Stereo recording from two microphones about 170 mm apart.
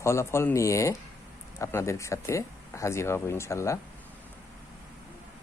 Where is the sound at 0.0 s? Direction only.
15° left (ahead or behind).